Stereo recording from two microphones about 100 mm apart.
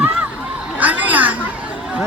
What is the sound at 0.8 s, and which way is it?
Children playing, 15° right (ahead or behind).